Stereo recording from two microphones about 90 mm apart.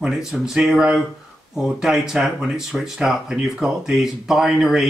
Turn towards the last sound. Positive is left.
turn(degrees=-5)  # may be behind; listen again after turning